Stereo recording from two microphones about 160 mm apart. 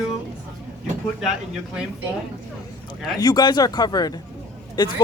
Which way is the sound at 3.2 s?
25° left (ahead or behind).